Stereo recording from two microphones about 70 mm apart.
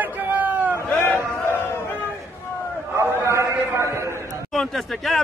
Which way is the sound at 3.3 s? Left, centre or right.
Right.